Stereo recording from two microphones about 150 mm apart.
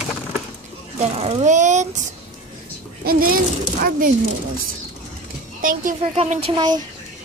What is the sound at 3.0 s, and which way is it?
Speech, 75° right (ahead or behind).